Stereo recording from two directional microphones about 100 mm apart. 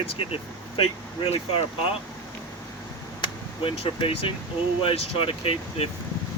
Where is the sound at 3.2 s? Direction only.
60° left (ahead or behind).